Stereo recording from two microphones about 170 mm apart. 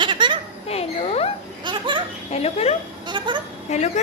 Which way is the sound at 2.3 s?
40° left (ahead or behind).